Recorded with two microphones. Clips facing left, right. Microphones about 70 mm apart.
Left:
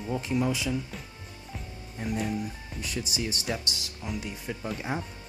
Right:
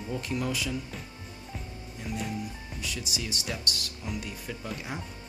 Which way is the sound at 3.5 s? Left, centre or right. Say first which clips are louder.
Left 2 dB; centre.